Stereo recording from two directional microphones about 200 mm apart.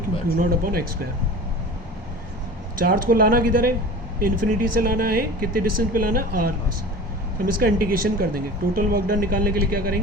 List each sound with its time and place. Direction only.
0.3 s speech: 50° right (ahead or behind)
2.7 s speech: 45° right (ahead or behind)
7.5 s speech: 45° right (ahead or behind)